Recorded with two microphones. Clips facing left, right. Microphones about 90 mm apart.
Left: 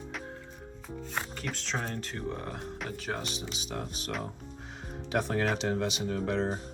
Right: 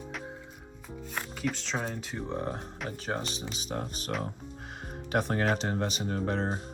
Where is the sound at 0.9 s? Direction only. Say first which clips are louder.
Left 1 dB; 5° right (ahead or behind).